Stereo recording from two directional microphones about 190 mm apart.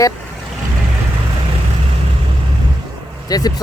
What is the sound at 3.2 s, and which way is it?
Speech, 20° left (ahead or behind).